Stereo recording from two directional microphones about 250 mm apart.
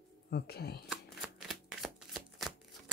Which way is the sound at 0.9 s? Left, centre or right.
Centre.